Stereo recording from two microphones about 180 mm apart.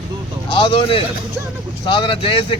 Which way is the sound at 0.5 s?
30° left (ahead or behind).